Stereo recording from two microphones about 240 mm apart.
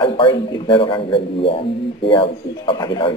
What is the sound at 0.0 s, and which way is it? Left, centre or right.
Speech, left.